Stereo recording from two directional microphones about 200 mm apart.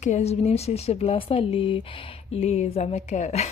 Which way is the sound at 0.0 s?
35° left (ahead or behind).